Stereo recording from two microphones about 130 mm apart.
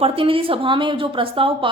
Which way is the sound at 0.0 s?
45° right (ahead or behind).